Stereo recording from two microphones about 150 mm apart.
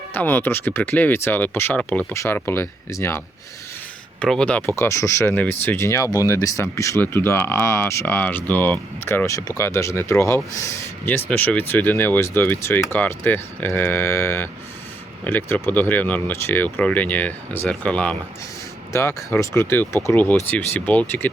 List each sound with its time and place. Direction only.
0.1 s speech: 15° left (ahead or behind)
4.2 s speech: 5° left (ahead or behind)
4.8 s speech: 20° left (ahead or behind)